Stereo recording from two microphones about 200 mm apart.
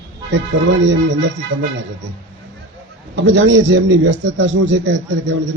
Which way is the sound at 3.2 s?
65° right (ahead or behind).